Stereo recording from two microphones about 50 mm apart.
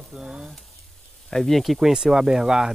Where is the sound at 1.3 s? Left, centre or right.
Centre.